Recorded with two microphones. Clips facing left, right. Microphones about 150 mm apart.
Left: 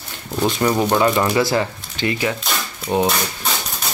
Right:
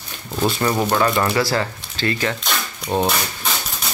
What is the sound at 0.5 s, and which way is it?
Speech, 15° left (ahead or behind).